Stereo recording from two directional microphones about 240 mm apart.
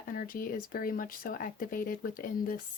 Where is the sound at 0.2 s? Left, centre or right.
Left.